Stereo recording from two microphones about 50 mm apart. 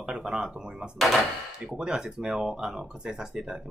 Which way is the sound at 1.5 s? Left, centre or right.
Centre.